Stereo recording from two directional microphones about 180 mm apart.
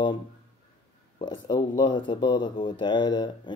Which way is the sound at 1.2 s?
25° left (ahead or behind).